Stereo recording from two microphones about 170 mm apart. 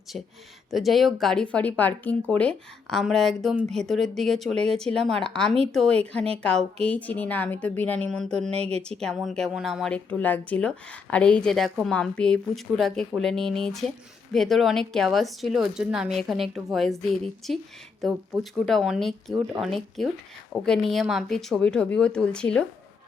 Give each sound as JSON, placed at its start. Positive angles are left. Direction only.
{"t": 0.7, "sound": "a woman's voice", "side_deg": 0}
{"t": 8.5, "sound": "a woman's voice", "side_deg": -35}
{"t": 8.8, "sound": "speech", "side_deg": 5}